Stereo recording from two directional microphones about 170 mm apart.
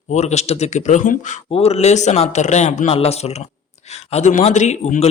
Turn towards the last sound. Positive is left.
turn(degrees=45)  # may be behind; listen again after turning